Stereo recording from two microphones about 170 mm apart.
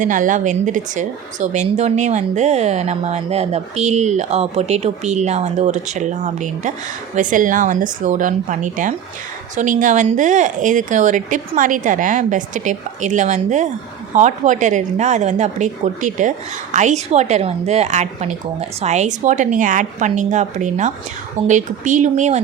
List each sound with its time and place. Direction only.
0.0 s speech: 50° right (ahead or behind)